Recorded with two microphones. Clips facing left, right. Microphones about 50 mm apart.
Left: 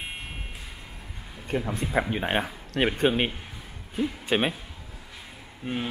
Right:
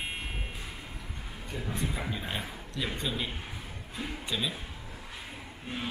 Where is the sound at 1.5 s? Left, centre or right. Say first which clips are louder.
Left 8 dB; left.